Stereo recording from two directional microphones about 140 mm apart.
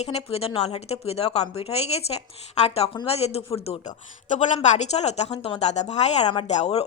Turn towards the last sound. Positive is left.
turn(degrees=50)  # may be behind; listen again after turning